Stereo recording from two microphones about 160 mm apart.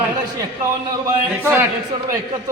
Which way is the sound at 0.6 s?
15° right (ahead or behind).